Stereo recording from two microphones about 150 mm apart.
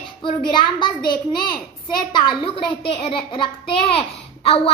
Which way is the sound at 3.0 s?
35° left (ahead or behind).